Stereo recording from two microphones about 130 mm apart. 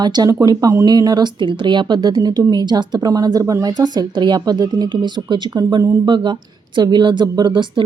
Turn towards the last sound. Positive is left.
turn(degrees=-40)  # may be behind; listen again after turning